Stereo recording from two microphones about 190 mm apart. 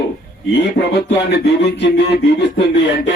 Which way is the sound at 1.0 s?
65° left (ahead or behind).